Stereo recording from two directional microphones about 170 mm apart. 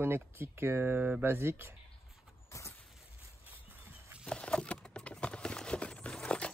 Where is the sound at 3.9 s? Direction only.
10° right (ahead or behind).